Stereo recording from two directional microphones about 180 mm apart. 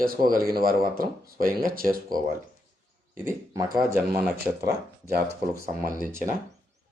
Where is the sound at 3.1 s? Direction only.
15° right (ahead or behind).